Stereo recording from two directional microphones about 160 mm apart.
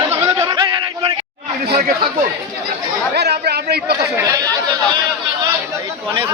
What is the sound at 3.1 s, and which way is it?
Chatter, 90° right.